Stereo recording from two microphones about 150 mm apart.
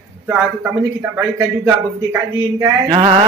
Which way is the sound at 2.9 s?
45° right (ahead or behind).